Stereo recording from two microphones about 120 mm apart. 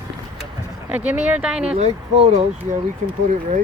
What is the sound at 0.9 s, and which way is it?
Speech, 15° right (ahead or behind).